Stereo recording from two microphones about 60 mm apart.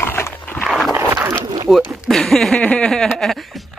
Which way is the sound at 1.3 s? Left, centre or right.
Right.